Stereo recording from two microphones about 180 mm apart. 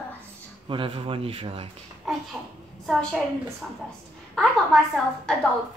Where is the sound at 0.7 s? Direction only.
30° right (ahead or behind).